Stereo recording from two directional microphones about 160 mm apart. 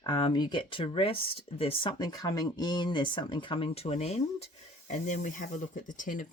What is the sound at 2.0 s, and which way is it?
Speech, 25° left (ahead or behind).